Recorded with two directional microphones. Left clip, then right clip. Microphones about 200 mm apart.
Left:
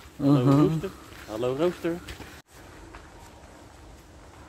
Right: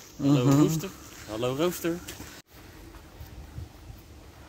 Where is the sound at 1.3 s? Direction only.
65° right (ahead or behind).